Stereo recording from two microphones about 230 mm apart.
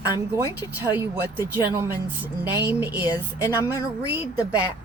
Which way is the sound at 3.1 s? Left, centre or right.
Centre.